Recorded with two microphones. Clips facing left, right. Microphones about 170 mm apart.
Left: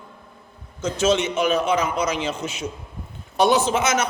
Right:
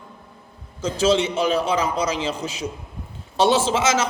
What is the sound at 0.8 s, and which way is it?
A man's voice, 30° right (ahead or behind).